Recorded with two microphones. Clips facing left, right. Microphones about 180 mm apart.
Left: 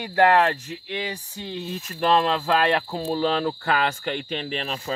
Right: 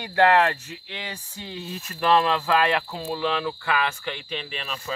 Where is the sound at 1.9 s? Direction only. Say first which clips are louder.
Even; 25° left (ahead or behind).